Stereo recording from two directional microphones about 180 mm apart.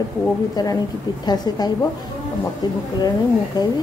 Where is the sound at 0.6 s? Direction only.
20° left (ahead or behind).